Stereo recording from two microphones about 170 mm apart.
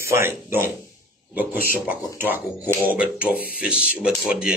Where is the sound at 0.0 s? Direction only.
15° right (ahead or behind).